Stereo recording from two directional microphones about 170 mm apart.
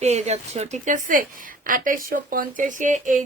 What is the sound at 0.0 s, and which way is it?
Speech, 40° right (ahead or behind).